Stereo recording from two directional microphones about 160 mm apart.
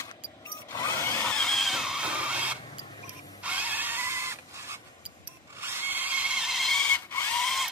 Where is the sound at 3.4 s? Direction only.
10° right (ahead or behind).